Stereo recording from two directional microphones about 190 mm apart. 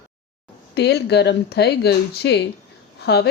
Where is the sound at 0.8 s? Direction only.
60° left (ahead or behind).